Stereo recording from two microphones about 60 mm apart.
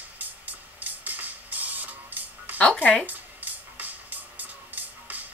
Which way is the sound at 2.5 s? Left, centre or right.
Centre.